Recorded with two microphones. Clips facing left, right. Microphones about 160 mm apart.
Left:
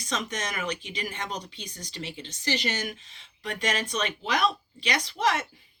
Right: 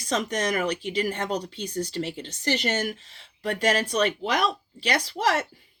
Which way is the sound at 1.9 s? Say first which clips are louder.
Right 7 dB; 45° right (ahead or behind).